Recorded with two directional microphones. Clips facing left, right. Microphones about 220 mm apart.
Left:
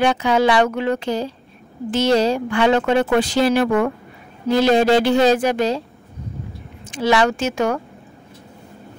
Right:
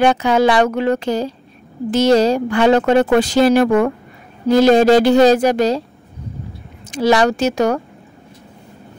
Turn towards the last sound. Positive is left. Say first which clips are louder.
# right 4 dB
turn(degrees=-40)  # may be behind; listen again after turning